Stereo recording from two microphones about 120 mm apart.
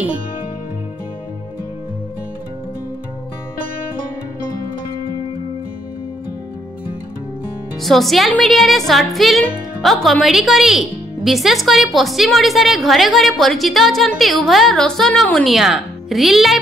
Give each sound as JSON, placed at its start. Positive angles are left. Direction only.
{"t": 7.8, "sound": "speech", "side_deg": 0}